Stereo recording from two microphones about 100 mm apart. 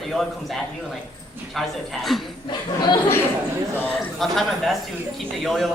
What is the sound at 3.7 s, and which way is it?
Speech, 20° left (ahead or behind).